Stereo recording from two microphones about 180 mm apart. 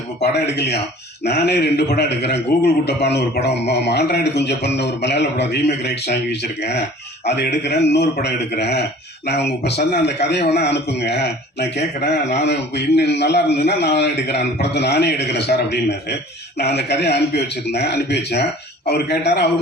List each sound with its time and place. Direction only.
0.2 s a man's voice: 70° left (ahead or behind)